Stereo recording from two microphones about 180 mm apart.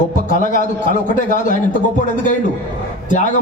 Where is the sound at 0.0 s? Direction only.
45° left (ahead or behind).